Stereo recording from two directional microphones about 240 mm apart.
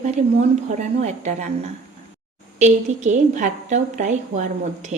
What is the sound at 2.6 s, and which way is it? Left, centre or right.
A woman's voice, right.